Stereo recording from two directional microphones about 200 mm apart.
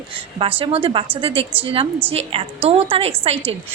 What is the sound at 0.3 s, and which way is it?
A woman's voice, 30° right (ahead or behind).